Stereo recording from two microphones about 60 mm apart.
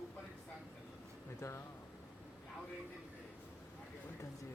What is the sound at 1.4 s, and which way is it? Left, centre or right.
Speech, left.